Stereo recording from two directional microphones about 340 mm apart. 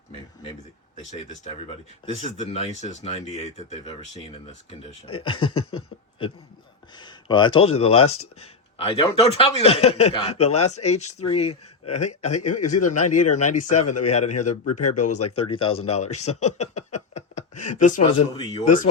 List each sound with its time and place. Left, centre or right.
1.1 s speech: centre
5.7 s a sound: centre
6.9 s speech: centre
8.0 s speech: left
8.8 s speech: centre
10.5 s speech: left
10.8 s speech: centre
12.4 s speech: left
15.5 s speech: centre
16.7 s a sound: left
17.7 s speech: left
18.3 s speech: centre